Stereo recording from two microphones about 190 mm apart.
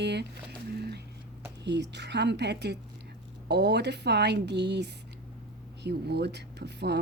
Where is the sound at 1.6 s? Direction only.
65° right (ahead or behind).